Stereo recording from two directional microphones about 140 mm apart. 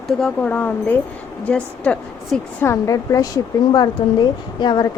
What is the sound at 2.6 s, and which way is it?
A woman's voice, 25° left (ahead or behind).